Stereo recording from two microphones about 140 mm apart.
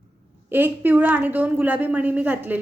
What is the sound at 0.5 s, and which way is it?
A woman's voice, 15° right (ahead or behind).